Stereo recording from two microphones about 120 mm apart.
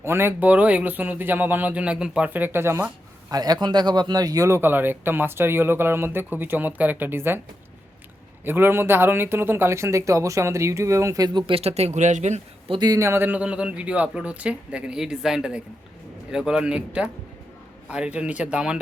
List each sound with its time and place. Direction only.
0.0 s speech: 20° right (ahead or behind)
3.3 s speech: 35° right (ahead or behind); by 7.3 s 20° right (ahead or behind)
8.4 s speech: 15° right (ahead or behind)
11.4 s speech: 55° right (ahead or behind); by 12.4 s 75° right (ahead or behind)
12.6 s speech: 45° right (ahead or behind)
12.9 s speech: 20° right (ahead or behind)